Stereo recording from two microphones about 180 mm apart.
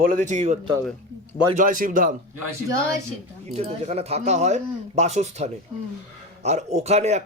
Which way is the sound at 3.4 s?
35° right (ahead or behind).